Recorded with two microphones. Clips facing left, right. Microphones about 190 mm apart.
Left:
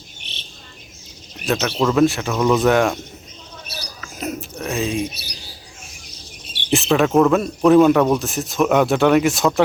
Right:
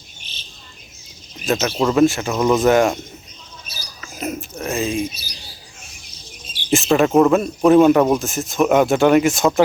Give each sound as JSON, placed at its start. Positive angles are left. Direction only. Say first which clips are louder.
{"t": 0.2, "sound": "bird", "louder": "left 2 dB", "side_deg": 65}
{"t": 1.5, "sound": "speech", "louder": "right 1 dB", "side_deg": 0}
{"t": 3.7, "sound": "rodents", "louder": "left 7 dB", "side_deg": 65}
{"t": 4.0, "sound": "a sound", "louder": "right 1 dB", "side_deg": 0}
{"t": 5.0, "sound": "speech", "louder": "right 1 dB", "side_deg": 65}
{"t": 6.4, "sound": "bird", "louder": "left 1 dB", "side_deg": 65}
{"t": 6.9, "sound": "speech", "louder": "right 1 dB", "side_deg": -5}